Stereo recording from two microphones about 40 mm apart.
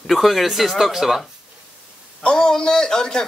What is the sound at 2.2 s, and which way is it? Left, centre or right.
A man's voice, centre.